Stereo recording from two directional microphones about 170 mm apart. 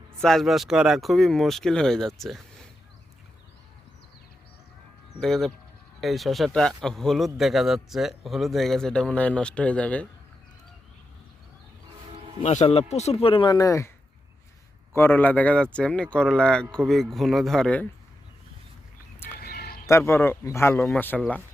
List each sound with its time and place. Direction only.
0.2 s speech: centre (ahead or behind)
5.2 s speech: centre (ahead or behind)
12.4 s speech: 35° left (ahead or behind); by 13.9 s 20° left (ahead or behind)
14.9 s speech: 10° left (ahead or behind)
19.4 s a sound: 65° left (ahead or behind)
19.9 s speech: 15° left (ahead or behind)